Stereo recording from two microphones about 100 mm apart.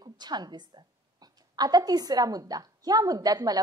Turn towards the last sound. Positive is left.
turn(degrees=-40)  # may be behind; listen again after turning